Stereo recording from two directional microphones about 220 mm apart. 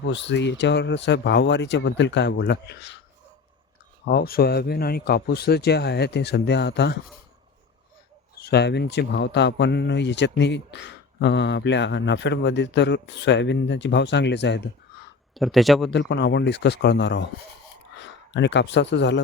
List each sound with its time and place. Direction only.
0.0 s speech: 55° left (ahead or behind)
4.0 s speech: 45° left (ahead or behind)
8.4 s speech: 45° left (ahead or behind)
15.4 s speech: centre (ahead or behind)
15.9 s speech: 50° left (ahead or behind)